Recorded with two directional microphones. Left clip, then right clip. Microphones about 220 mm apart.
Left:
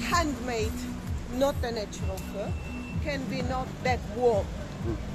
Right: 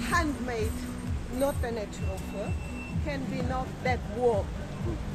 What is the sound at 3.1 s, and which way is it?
Speech, 20° left (ahead or behind).